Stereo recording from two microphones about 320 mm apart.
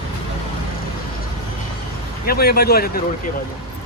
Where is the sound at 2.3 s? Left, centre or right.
Left.